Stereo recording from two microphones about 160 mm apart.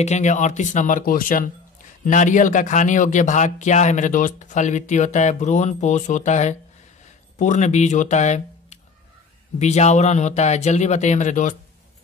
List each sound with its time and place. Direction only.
0.0 s a man's voice: 45° left (ahead or behind)